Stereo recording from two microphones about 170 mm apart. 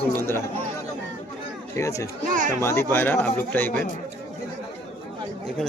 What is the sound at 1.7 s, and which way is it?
Speech, 20° left (ahead or behind).